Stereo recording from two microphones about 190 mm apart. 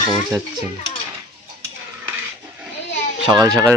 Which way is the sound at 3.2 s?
20° right (ahead or behind).